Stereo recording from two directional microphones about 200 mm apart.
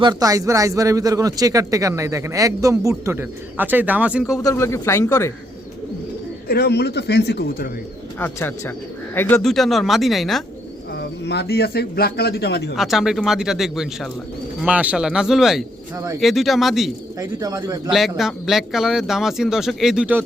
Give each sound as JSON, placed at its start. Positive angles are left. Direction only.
{"t": 0.0, "sound": "speech", "side_deg": -20}
{"t": 4.3, "sound": "speech", "side_deg": 15}
{"t": 6.5, "sound": "a man's voice", "side_deg": 55}
{"t": 8.2, "sound": "speech", "side_deg": 10}
{"t": 10.9, "sound": "speech", "side_deg": 55}
{"t": 12.7, "sound": "speech", "side_deg": 0}
{"t": 17.2, "sound": "speech", "side_deg": -15}
{"t": 18.2, "sound": "speech", "side_deg": 0}